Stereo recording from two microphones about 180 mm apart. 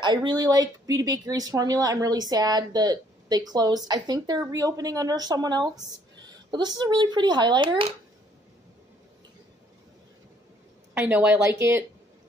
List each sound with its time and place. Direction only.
0.0 s speech: 25° right (ahead or behind)
11.0 s speech: 10° right (ahead or behind)